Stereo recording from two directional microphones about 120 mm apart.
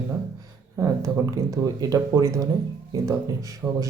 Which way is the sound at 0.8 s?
25° right (ahead or behind).